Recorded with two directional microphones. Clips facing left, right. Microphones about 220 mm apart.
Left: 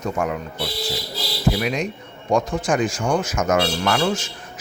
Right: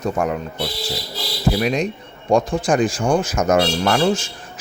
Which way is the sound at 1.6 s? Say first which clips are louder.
Right 4 dB; 35° right (ahead or behind).